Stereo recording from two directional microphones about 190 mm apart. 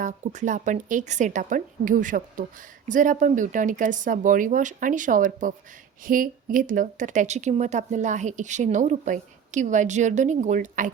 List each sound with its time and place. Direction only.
0.0 s a woman's voice: 40° right (ahead or behind)